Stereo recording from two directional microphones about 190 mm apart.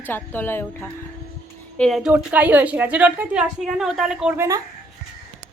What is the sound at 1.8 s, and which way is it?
A woman's voice, centre (ahead or behind).